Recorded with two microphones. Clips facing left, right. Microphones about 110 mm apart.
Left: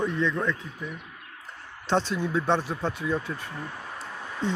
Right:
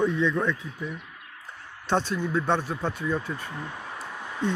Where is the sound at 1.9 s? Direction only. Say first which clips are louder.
Even; 10° right (ahead or behind).